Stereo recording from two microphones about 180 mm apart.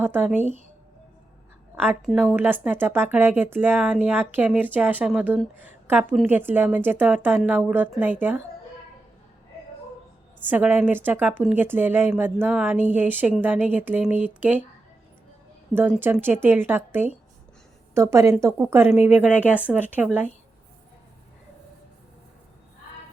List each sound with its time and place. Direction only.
0.0 s a woman's voice: 10° right (ahead or behind)
1.7 s a woman's voice: 10° right (ahead or behind)
10.5 s a woman's voice: 10° right (ahead or behind)
15.7 s a woman's voice: 10° right (ahead or behind)